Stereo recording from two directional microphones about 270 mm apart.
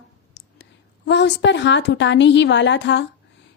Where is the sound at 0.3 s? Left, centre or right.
Left.